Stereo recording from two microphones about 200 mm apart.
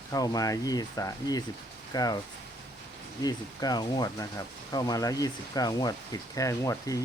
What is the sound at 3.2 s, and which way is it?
Speech, 20° left (ahead or behind).